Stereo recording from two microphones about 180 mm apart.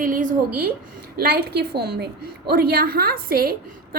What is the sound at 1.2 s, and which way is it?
A woman's voice, 60° right (ahead or behind).